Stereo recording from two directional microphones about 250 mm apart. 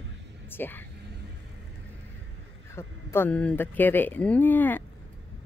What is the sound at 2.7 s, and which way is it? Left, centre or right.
Speech, centre.